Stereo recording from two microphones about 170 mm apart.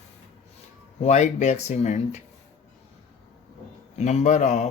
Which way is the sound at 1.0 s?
45° left (ahead or behind).